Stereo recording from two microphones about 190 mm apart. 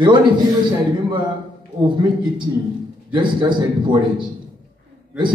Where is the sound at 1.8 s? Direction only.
25° right (ahead or behind).